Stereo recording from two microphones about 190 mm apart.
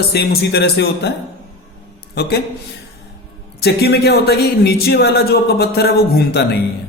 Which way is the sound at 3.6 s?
55° left (ahead or behind).